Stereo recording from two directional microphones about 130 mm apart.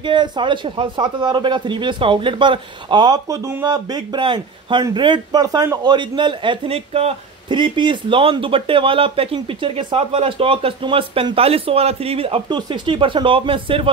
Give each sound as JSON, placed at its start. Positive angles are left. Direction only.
{"t": 0.0, "sound": "speech", "side_deg": -35}